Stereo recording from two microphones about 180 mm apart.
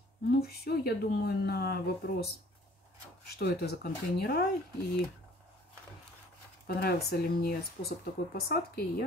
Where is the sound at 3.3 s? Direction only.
60° left (ahead or behind).